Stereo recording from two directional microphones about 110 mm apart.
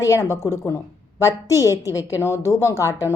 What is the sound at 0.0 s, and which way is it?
A woman's voice, 30° left (ahead or behind).